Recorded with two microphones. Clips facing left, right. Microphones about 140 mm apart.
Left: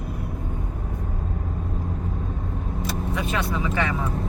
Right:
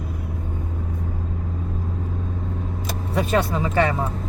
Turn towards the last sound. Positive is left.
turn(degrees=-40)  # may be behind; listen again after turning